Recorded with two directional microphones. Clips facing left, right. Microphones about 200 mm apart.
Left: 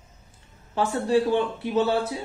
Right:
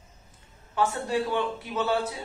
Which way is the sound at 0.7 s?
30° left (ahead or behind).